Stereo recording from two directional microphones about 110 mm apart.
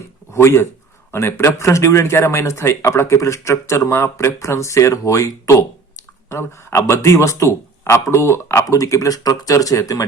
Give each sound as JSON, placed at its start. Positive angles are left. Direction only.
{"t": 0.3, "sound": "speech", "side_deg": 25}